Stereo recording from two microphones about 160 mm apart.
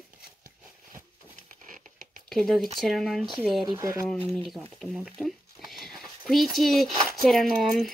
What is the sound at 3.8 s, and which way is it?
Speech, 20° right (ahead or behind).